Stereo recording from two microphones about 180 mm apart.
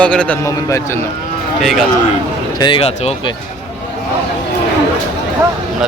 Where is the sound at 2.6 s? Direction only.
30° left (ahead or behind).